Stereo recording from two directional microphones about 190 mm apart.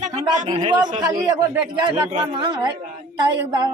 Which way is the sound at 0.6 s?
25° right (ahead or behind).